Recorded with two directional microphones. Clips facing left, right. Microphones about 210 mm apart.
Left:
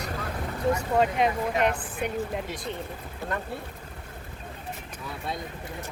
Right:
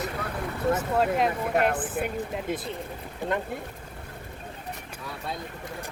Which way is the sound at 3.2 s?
15° right (ahead or behind).